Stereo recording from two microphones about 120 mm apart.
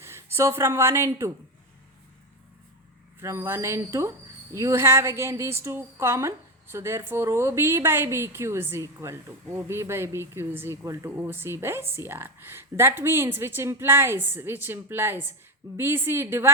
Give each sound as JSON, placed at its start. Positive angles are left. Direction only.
{"t": 0.0, "sound": "speech", "side_deg": -20}
{"t": 3.2, "sound": "a woman's voice", "side_deg": -20}